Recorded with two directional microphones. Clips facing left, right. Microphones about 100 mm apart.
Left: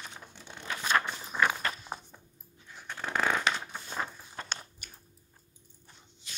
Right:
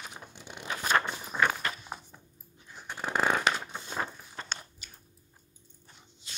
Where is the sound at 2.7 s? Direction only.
15° right (ahead or behind).